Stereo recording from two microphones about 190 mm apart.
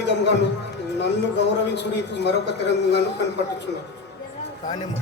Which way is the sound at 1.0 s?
65° left (ahead or behind).